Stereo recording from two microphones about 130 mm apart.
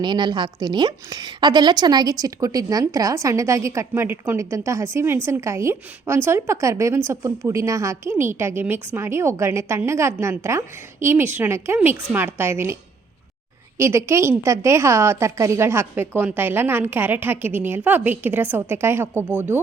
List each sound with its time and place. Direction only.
0.0 s a woman's voice: 35° right (ahead or behind); by 19.0 s 20° right (ahead or behind)